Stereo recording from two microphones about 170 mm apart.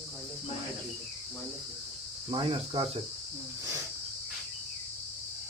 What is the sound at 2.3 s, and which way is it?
Cricket, 30° right (ahead or behind).